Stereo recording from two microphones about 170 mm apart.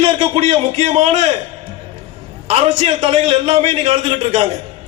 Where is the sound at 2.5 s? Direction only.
35° right (ahead or behind).